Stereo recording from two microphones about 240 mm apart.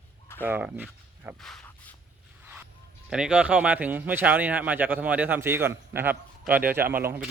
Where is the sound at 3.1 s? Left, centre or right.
Centre.